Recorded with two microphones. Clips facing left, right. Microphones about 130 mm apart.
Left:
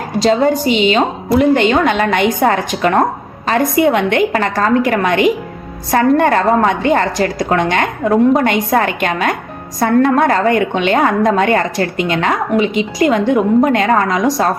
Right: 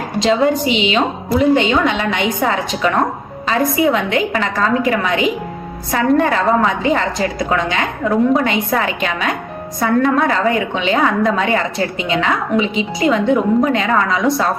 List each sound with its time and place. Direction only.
0.3 s a woman's voice: 40° left (ahead or behind)
1.4 s a woman's voice: 55° left (ahead or behind)
4.4 s a woman's voice: 45° left (ahead or behind)
12.3 s a woman's voice: 65° left (ahead or behind); by 14.3 s 45° left (ahead or behind)